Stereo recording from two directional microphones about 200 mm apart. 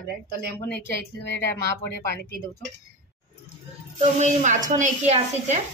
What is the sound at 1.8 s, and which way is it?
Speech, 55° left (ahead or behind).